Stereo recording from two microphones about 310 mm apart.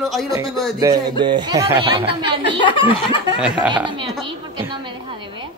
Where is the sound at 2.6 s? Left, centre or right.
Centre.